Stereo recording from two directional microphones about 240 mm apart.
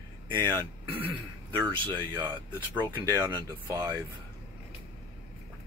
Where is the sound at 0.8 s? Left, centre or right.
Centre.